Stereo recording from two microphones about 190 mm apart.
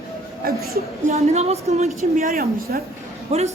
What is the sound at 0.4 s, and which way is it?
Speech, 50° right (ahead or behind).